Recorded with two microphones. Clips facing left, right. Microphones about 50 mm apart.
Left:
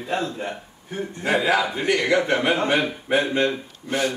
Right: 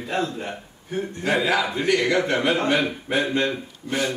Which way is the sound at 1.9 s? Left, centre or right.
Left.